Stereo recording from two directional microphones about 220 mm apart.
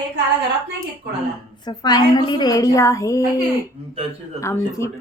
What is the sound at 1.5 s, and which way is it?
A woman's voice, 20° left (ahead or behind).